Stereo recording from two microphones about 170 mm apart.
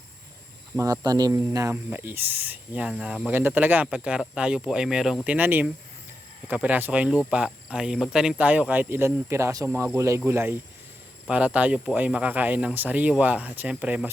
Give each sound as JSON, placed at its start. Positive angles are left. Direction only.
{"t": 0.8, "sound": "speech", "side_deg": -20}